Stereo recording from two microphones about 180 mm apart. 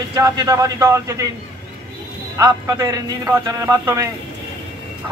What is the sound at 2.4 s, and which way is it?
A man's voice, 20° right (ahead or behind).